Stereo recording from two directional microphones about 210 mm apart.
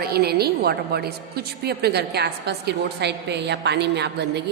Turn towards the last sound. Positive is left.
turn(degrees=-55)  # may be behind; listen again after turning